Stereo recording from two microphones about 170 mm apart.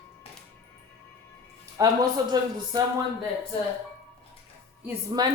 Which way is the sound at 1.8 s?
25° right (ahead or behind).